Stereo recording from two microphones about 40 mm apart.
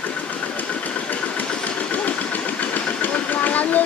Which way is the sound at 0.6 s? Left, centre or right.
Left.